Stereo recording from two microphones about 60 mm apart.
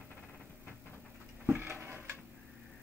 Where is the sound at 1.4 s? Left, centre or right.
Right.